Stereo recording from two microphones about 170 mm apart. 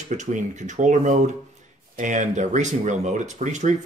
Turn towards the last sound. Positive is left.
turn(degrees=-45)  # may be behind; listen again after turning